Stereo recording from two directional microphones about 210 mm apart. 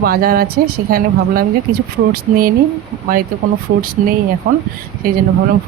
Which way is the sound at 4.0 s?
40° right (ahead or behind).